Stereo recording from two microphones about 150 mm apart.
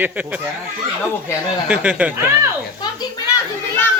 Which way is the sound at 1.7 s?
10° right (ahead or behind).